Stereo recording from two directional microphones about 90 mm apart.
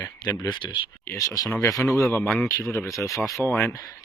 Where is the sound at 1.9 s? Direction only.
25° left (ahead or behind).